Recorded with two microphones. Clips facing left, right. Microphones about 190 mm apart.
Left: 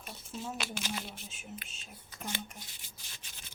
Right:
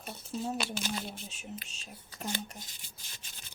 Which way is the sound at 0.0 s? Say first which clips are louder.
Right 5 dB; 35° right (ahead or behind).